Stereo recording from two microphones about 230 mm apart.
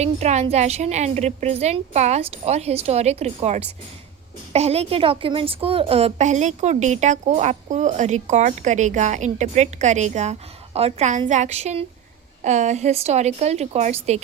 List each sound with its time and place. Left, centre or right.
0.0 s a woman's voice: right